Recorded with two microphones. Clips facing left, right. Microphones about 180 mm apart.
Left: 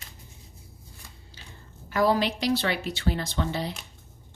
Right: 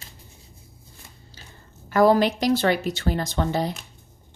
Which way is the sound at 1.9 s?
50° right (ahead or behind).